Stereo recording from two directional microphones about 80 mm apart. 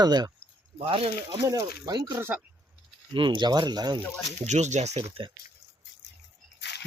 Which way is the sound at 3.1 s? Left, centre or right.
Right.